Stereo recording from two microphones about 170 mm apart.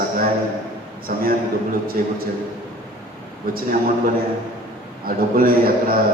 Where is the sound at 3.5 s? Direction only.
55° right (ahead or behind).